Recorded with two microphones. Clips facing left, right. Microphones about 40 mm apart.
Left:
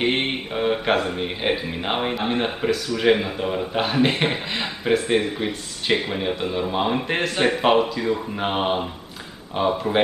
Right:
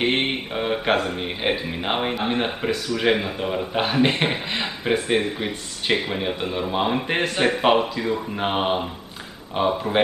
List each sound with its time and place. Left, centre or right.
0.0 s speech: centre